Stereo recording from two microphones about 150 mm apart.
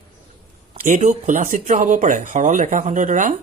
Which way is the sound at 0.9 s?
55° right (ahead or behind).